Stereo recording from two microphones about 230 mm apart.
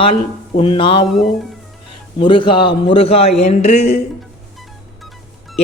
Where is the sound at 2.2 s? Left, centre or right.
Left.